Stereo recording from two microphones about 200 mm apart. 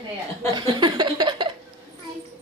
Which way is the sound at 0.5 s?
20° right (ahead or behind).